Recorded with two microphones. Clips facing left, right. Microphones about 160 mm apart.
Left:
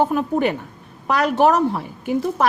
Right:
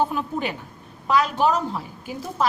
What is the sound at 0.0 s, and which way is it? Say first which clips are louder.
A woman's voice: left 6 dB; 60° left (ahead or behind).